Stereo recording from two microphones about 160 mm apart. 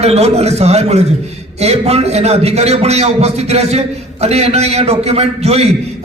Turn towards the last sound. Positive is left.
turn(degrees=-40)  # may be behind; listen again after turning